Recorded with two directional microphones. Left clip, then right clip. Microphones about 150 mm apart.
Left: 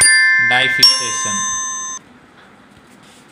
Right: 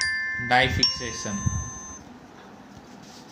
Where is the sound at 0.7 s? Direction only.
90° left.